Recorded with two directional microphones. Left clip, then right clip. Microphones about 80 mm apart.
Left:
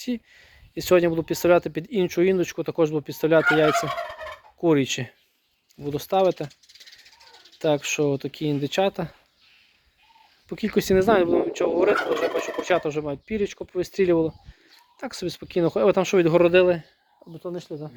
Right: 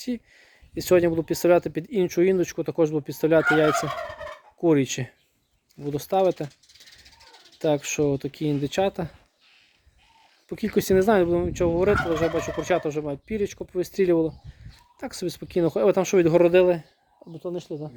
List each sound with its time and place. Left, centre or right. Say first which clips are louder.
0.0 s speech: left 1 dB; right
7.6 s speech: left 1 dB; right
10.5 s speech: even; right